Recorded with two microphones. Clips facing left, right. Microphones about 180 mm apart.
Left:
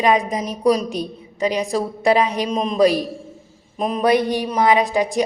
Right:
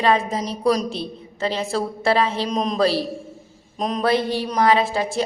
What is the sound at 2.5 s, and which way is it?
A man's voice, 5° left (ahead or behind).